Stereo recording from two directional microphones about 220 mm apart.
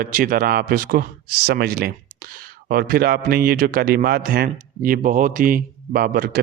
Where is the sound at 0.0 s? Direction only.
40° right (ahead or behind).